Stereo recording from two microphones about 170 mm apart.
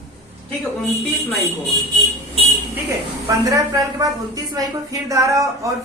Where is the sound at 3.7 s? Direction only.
20° right (ahead or behind).